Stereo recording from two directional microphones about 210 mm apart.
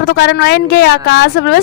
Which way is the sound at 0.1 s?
50° left (ahead or behind).